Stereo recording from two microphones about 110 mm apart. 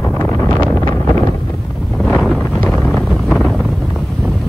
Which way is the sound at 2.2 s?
Centre (ahead or behind).